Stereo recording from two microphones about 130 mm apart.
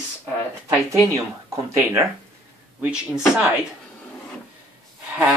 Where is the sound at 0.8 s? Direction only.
25° right (ahead or behind).